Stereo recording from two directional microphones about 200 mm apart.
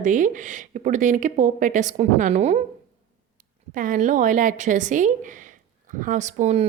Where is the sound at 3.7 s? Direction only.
40° right (ahead or behind).